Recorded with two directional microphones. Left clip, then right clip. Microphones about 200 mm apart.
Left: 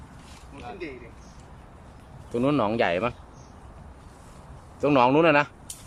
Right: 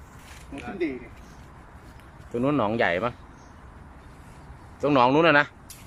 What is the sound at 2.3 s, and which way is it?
Speech, centre (ahead or behind).